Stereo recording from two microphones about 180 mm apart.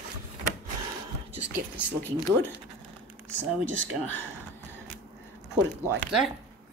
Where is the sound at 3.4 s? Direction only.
90° right.